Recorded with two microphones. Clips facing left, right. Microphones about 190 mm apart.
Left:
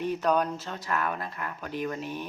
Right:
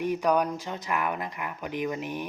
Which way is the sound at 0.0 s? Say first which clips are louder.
Right 1 dB; 10° right (ahead or behind).